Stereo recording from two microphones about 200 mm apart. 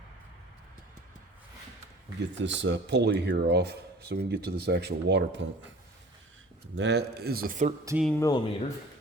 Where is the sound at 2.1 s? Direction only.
60° right (ahead or behind); by 7.7 s 40° right (ahead or behind).